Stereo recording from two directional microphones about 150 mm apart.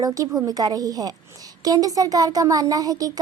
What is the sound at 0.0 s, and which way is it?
A woman's voice, 25° right (ahead or behind).